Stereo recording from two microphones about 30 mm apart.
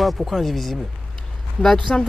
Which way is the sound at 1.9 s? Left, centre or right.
Left.